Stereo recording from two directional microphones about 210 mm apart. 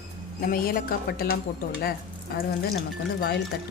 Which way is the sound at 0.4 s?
45° left (ahead or behind).